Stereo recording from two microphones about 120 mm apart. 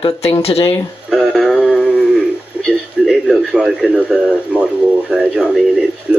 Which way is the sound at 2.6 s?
Centre (ahead or behind).